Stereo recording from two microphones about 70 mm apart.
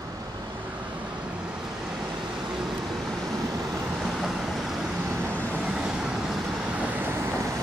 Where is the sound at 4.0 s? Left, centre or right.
Centre.